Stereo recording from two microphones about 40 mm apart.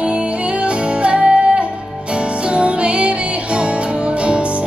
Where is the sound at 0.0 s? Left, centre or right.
Right.